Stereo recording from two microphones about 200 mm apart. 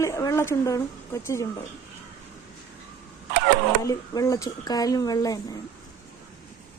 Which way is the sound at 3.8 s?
15° left (ahead or behind).